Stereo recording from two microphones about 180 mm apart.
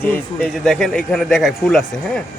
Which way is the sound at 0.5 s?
Centre (ahead or behind).